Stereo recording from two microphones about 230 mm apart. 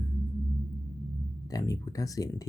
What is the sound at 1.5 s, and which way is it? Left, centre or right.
Speech, centre.